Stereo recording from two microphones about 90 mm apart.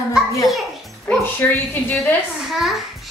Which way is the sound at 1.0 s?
20° left (ahead or behind).